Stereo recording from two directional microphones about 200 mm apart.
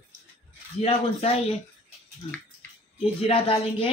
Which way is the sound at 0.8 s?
30° left (ahead or behind).